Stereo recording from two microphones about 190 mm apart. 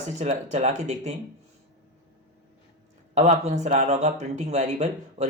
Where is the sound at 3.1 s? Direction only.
35° right (ahead or behind).